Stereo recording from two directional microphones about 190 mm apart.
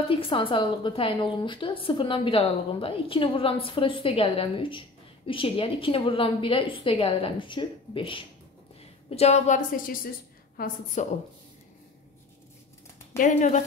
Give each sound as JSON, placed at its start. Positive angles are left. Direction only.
{"t": 0.1, "sound": "a woman's voice", "side_deg": 30}
{"t": 13.2, "sound": "a woman's voice", "side_deg": 40}